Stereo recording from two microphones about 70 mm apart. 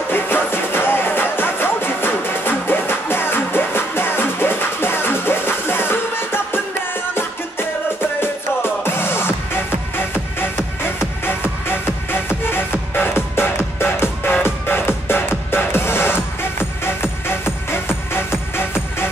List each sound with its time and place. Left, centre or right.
0.1 s music: left
8.2 s music: left